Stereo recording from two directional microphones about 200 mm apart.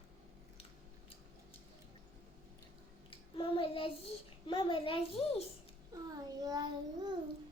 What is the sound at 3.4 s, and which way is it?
Child singing, 25° left (ahead or behind).